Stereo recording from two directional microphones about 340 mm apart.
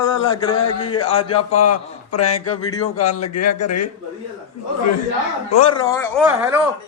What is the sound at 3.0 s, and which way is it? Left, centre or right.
Speech, left.